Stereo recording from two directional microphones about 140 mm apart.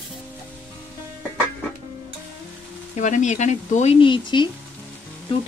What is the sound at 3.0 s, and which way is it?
Speech, 60° left (ahead or behind).